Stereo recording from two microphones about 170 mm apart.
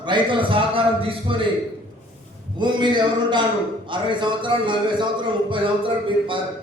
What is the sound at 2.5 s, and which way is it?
A man's voice, 25° right (ahead or behind).